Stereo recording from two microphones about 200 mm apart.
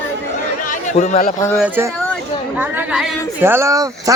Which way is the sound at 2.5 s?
10° right (ahead or behind).